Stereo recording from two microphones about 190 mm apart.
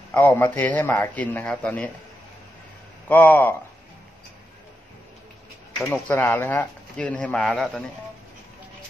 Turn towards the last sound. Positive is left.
turn(degrees=5)  # may be behind; listen again after turning